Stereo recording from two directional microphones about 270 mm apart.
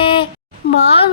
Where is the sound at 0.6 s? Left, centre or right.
Left.